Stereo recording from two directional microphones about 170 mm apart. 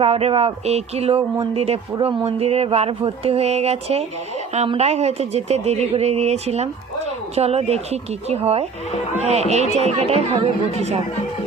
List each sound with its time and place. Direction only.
0.0 s speech: 35° right (ahead or behind)